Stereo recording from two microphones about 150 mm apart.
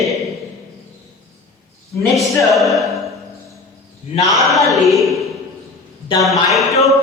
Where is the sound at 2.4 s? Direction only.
Centre (ahead or behind).